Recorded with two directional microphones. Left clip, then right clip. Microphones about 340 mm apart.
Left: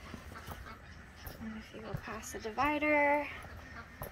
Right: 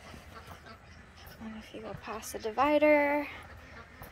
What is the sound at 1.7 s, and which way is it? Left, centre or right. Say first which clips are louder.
A woman's voice: right 4 dB; centre.